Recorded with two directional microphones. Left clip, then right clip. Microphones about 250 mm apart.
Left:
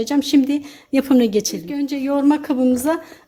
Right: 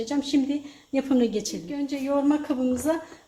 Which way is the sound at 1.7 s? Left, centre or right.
Left.